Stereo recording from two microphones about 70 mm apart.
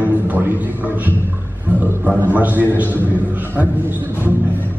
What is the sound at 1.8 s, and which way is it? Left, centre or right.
Speech, right.